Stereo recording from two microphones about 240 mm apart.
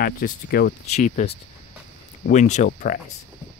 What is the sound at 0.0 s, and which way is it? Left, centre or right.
Speech, left.